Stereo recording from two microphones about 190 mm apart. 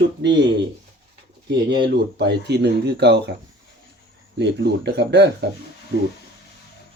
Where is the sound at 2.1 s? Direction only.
60° right (ahead or behind).